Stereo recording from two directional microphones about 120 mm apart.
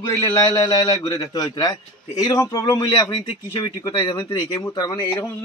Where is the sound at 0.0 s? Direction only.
30° left (ahead or behind).